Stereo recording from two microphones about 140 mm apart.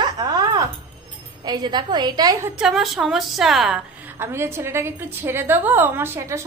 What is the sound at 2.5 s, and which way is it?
A woman's voice, centre (ahead or behind).